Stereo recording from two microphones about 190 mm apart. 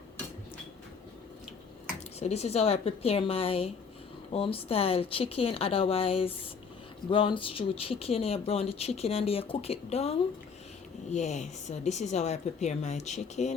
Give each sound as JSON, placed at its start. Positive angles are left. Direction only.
{"t": 2.1, "sound": "speech", "side_deg": 35}